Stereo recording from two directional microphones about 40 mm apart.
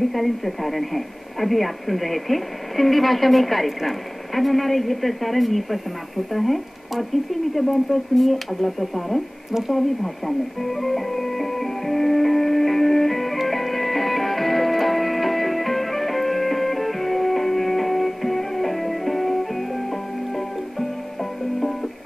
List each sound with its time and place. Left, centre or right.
0.1 s speech: centre
9.8 s music: centre